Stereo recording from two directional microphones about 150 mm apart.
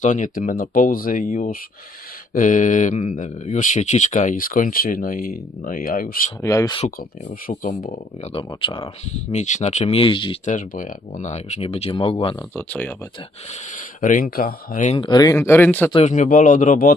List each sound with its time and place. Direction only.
0.0 s speech: 55° left (ahead or behind)
6.4 s speech: 25° left (ahead or behind)
6.7 s speech: 50° left (ahead or behind)
8.2 s speech: 35° left (ahead or behind)
9.1 s speech: 50° left (ahead or behind); by 10.3 s 35° left (ahead or behind)
10.4 s speech: 60° left (ahead or behind); by 12.4 s 35° left (ahead or behind)
12.5 s speech: 10° left (ahead or behind)
13.5 s speech: 60° left (ahead or behind)
14.9 s speech: 30° left (ahead or behind)
15.4 s speech: 15° left (ahead or behind)
16.0 s speech: 55° left (ahead or behind)